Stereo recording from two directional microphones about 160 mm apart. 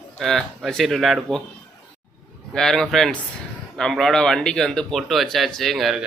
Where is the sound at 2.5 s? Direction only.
5° left (ahead or behind).